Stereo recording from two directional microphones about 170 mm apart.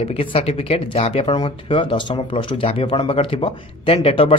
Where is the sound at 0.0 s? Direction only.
35° left (ahead or behind).